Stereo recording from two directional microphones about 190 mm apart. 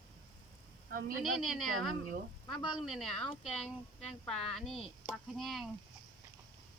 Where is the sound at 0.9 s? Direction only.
45° right (ahead or behind).